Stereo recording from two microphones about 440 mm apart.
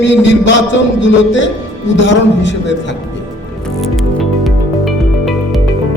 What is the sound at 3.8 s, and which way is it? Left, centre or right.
Music, centre.